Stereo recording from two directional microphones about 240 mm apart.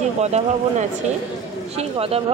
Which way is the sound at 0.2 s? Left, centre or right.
Right.